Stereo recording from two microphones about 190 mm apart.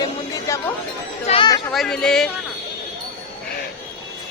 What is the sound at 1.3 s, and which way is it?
Speech, 25° left (ahead or behind).